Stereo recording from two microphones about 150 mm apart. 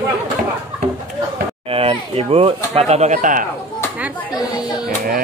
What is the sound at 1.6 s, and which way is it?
Speech, 40° right (ahead or behind).